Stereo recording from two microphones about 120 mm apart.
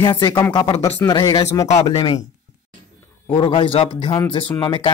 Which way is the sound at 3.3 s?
45° left (ahead or behind).